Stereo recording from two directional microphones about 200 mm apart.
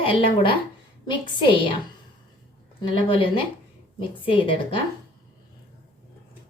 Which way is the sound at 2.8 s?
25° left (ahead or behind).